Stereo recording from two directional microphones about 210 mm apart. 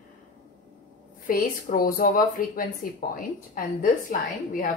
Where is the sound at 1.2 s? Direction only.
40° left (ahead or behind).